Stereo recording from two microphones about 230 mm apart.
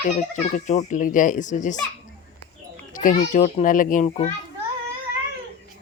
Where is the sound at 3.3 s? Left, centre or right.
Left.